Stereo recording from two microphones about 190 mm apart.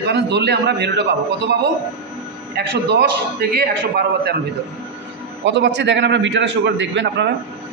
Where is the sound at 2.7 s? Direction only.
60° right (ahead or behind).